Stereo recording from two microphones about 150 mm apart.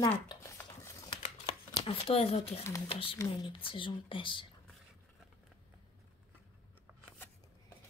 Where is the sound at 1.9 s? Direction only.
40° left (ahead or behind).